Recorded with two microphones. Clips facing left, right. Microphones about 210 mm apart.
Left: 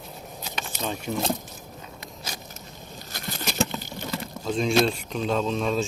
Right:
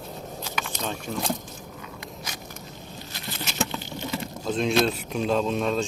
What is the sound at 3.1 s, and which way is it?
Patter, 45° left (ahead or behind).